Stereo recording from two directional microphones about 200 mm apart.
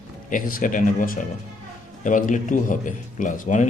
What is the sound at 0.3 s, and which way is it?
Speech, 45° left (ahead or behind).